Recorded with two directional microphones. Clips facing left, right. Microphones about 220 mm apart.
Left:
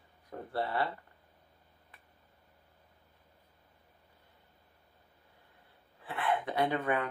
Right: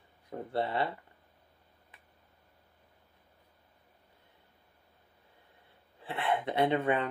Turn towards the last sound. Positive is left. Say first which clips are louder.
# right 3 dB
turn(degrees=-25)  # may be behind; listen again after turning